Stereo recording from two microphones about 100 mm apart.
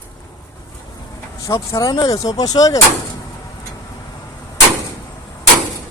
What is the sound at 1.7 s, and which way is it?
Speech, 40° left (ahead or behind).